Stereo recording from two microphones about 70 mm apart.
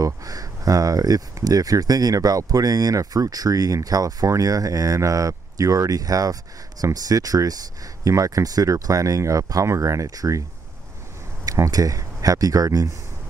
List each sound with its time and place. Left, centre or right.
0.0 s speech: right
11.5 s speech: right